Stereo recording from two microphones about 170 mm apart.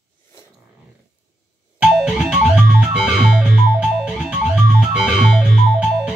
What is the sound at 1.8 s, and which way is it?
Music, 5° right (ahead or behind).